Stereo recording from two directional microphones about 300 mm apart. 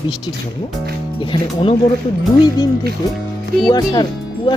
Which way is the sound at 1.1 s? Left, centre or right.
Centre.